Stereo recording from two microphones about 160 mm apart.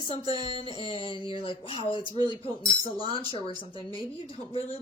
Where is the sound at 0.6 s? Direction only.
30° right (ahead or behind).